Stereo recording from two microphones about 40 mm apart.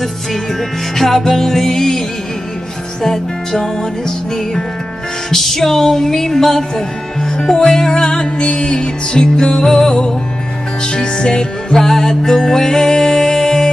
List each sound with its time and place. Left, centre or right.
0.9 s music: centre
5.3 s music: centre
11.7 s music: centre